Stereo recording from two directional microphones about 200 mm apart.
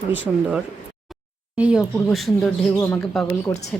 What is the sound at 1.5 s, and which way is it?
A woman's voice, 5° right (ahead or behind).